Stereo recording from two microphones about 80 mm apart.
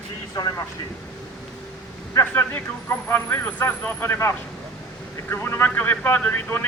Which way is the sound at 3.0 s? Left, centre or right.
Left.